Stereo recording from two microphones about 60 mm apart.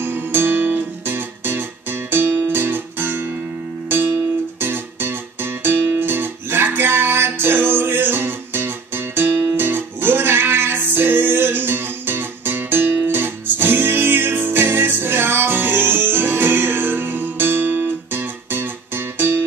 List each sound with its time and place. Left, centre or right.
0.0 s music: right